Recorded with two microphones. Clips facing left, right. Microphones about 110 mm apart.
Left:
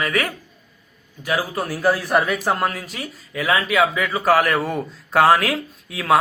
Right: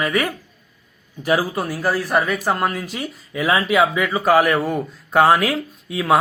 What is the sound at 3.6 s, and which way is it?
A man's voice, 10° right (ahead or behind).